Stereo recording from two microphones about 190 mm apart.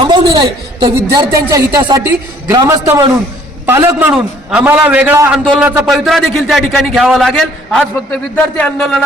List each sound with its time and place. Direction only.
0.0 s a man's voice: 25° right (ahead or behind); by 9.0 s 5° left (ahead or behind)